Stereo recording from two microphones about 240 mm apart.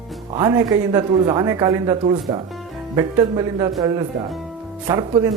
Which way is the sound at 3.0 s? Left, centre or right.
Centre.